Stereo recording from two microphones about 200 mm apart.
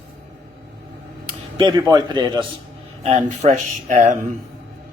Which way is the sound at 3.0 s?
30° right (ahead or behind).